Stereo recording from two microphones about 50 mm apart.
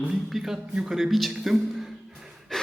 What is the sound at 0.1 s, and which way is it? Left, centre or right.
A man's voice, centre.